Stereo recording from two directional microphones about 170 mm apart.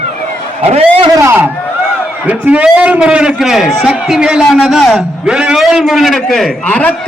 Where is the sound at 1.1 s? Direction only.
15° right (ahead or behind).